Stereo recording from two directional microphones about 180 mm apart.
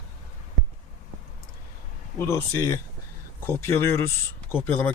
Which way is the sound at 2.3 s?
15° left (ahead or behind).